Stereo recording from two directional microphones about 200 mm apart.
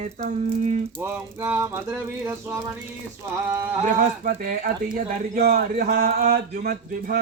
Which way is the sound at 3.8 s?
45° right (ahead or behind).